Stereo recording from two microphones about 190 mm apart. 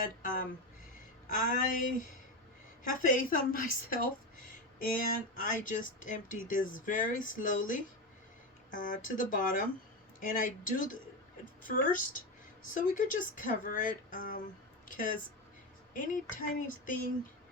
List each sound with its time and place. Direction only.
0.0 s speech: 45° left (ahead or behind)
5.4 s speech: 45° left (ahead or behind)
14.8 s a sound: 45° left (ahead or behind)
15.9 s speech: 45° left (ahead or behind)